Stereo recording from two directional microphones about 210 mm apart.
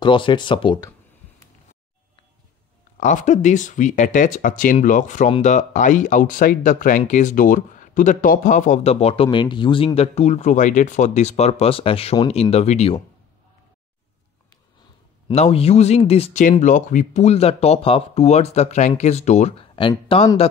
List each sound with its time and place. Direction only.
0.0 s speech: 25° left (ahead or behind)
3.0 s speech: 35° left (ahead or behind)
15.2 s speech: 25° left (ahead or behind)